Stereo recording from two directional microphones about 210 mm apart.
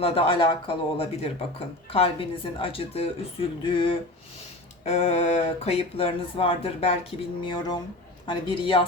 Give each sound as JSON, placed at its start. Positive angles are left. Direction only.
{"t": 0.0, "sound": "speech", "side_deg": 25}